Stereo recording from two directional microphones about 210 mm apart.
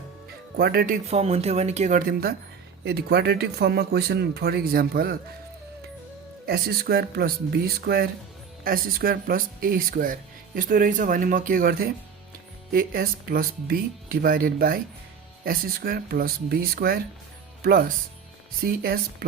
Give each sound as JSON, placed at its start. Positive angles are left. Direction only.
{"t": 0.5, "sound": "speech", "side_deg": -45}
{"t": 1.0, "sound": "speech", "side_deg": -30}
{"t": 6.4, "sound": "speech", "side_deg": -45}